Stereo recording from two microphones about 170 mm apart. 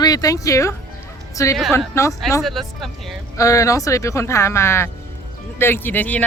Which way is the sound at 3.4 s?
20° left (ahead or behind).